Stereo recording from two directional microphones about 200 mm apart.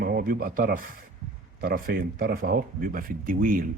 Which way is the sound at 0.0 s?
50° right (ahead or behind).